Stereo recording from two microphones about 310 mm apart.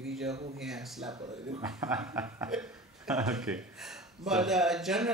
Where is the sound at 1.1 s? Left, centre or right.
Centre.